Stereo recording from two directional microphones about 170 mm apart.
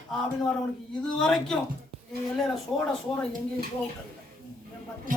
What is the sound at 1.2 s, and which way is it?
Speech, 5° left (ahead or behind).